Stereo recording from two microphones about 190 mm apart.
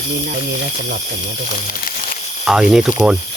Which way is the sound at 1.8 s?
45° left (ahead or behind).